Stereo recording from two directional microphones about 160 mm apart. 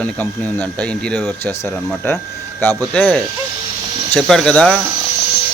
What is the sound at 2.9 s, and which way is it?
Speech, 10° left (ahead or behind).